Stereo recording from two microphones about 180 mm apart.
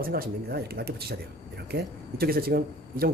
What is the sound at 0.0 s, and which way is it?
Speech, 55° right (ahead or behind).